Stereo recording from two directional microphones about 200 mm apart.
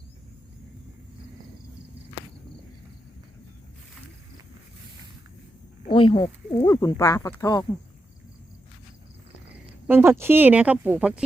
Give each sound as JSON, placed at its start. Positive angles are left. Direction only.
{"t": 5.9, "sound": "speech", "side_deg": 25}
{"t": 9.8, "sound": "speech", "side_deg": -10}